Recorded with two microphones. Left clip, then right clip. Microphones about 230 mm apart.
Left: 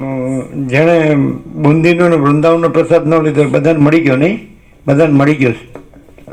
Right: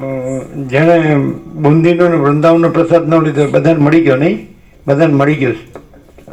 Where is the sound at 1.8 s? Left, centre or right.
Left.